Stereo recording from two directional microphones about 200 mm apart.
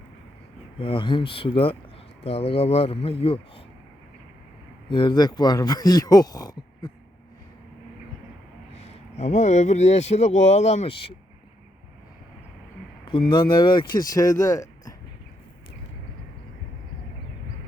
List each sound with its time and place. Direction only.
0.8 s a man's voice: 25° left (ahead or behind)
4.9 s a man's voice: 25° left (ahead or behind)
8.8 s speech: 35° left (ahead or behind)
13.1 s a man's voice: 25° left (ahead or behind)